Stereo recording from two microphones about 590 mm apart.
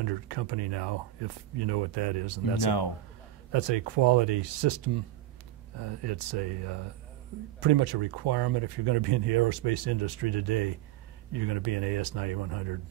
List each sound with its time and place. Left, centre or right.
0.0 s speech: right